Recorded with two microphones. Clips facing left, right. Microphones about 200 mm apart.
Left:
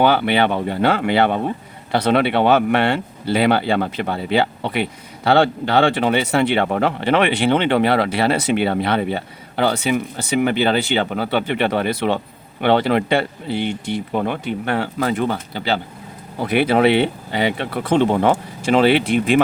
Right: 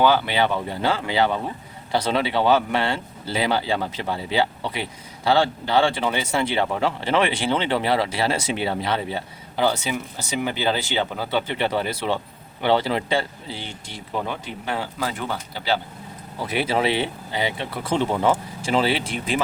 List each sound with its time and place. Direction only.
0.0 s speech: 60° left (ahead or behind)